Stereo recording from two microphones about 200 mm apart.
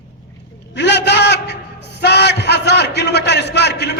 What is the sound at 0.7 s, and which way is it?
A man's voice, 60° left (ahead or behind).